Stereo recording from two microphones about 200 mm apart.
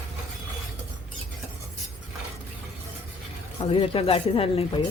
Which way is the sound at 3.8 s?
25° left (ahead or behind).